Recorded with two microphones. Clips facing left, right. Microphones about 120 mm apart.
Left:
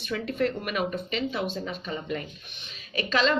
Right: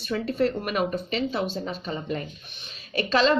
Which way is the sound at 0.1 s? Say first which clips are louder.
Right 3 dB; 35° right (ahead or behind).